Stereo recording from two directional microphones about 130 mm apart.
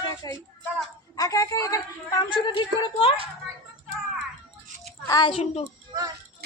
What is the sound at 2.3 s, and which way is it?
Speech, 35° left (ahead or behind).